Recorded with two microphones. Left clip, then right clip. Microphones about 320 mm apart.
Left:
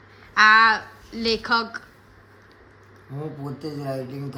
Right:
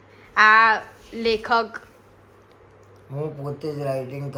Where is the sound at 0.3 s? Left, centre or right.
Centre.